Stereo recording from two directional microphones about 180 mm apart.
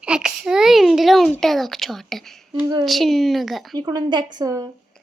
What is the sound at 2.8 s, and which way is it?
Speech, centre (ahead or behind).